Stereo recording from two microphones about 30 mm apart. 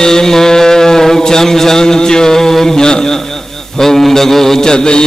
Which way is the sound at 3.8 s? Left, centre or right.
Centre.